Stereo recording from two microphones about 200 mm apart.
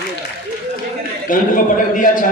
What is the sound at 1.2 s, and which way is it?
A man's voice, 40° left (ahead or behind).